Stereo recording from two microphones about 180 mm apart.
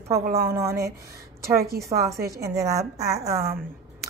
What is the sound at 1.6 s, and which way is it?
Speech, 60° right (ahead or behind).